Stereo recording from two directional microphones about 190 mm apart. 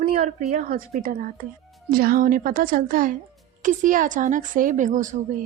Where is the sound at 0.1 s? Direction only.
35° right (ahead or behind).